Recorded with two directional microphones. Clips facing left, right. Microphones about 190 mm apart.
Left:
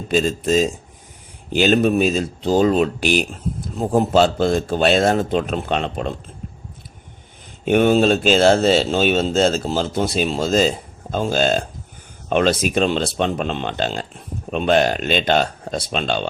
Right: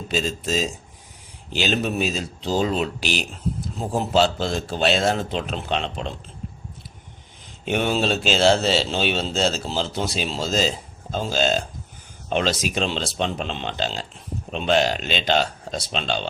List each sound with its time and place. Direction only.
0.1 s speech: 55° left (ahead or behind)
7.6 s speech: 50° left (ahead or behind)